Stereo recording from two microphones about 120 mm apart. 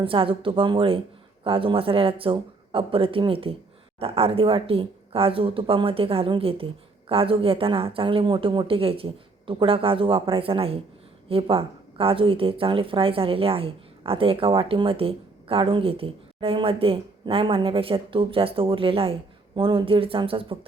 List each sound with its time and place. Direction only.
0.0 s speech: 50° right (ahead or behind)